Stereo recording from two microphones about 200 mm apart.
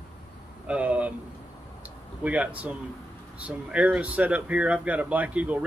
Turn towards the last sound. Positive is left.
turn(degrees=-5)  # may be behind; listen again after turning